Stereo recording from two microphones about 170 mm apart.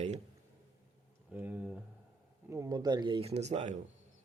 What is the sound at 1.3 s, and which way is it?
Speech, 10° right (ahead or behind).